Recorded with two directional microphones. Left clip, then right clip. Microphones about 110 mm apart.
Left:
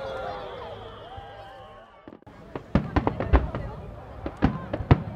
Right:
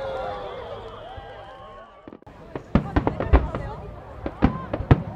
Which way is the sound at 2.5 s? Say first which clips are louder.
Right 3 dB; 5° left (ahead or behind).